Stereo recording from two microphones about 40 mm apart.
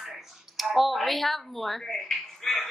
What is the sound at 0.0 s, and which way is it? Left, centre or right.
Speech, centre.